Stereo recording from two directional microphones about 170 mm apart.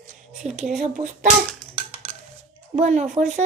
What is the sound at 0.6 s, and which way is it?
Speech, 50° right (ahead or behind).